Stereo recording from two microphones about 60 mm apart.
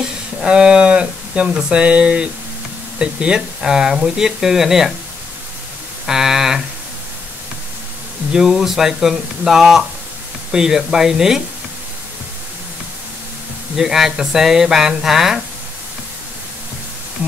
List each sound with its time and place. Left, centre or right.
0.4 s speech: centre
6.0 s a sound: centre
8.3 s speech: centre
13.7 s speech: centre